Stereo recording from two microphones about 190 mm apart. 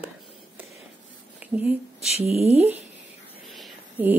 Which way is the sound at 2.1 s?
35° right (ahead or behind).